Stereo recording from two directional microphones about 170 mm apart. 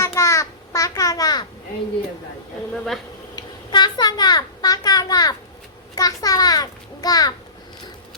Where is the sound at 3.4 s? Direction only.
25° left (ahead or behind).